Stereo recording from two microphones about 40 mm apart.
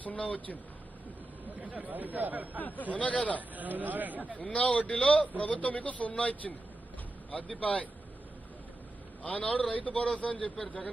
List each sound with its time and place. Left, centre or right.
0.0 s a man's voice: left
1.5 s speech: right
2.6 s a man's voice: left
3.3 s speech: right
4.3 s a man's voice: left
9.2 s a man's voice: left